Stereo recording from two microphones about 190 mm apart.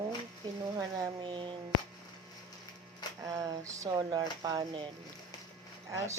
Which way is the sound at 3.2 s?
20° right (ahead or behind).